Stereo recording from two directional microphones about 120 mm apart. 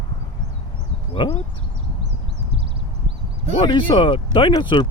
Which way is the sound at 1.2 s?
40° left (ahead or behind).